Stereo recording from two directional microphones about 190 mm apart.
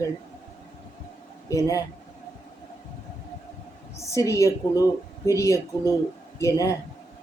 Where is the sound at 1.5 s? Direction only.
15° left (ahead or behind).